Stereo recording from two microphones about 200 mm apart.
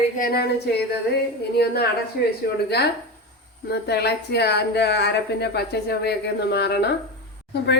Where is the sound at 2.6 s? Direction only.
55° left (ahead or behind).